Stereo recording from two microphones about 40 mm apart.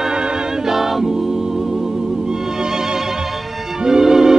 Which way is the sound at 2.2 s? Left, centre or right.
Centre.